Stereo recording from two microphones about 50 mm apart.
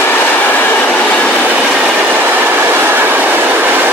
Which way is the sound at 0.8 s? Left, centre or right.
Left.